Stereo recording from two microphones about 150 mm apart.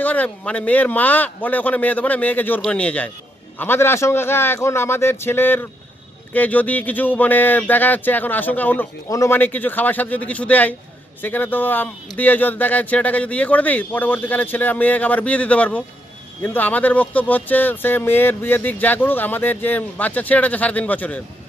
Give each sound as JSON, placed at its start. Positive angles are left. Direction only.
{"t": 0.0, "sound": "speech", "side_deg": 10}